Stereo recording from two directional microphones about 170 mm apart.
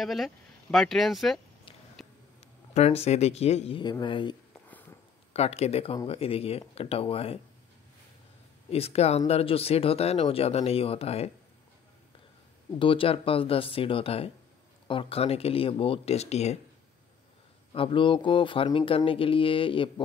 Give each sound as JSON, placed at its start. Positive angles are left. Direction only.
{"t": 0.0, "sound": "speech", "side_deg": 0}
{"t": 2.0, "sound": "a sound", "side_deg": 0}
{"t": 2.7, "sound": "speech", "side_deg": 40}
{"t": 5.3, "sound": "speech", "side_deg": 40}
{"t": 8.6, "sound": "speech", "side_deg": 35}
{"t": 12.7, "sound": "speech", "side_deg": 30}
{"t": 17.7, "sound": "speech", "side_deg": 30}